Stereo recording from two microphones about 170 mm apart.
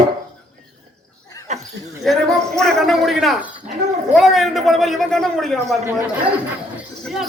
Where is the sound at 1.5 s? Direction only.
45° right (ahead or behind).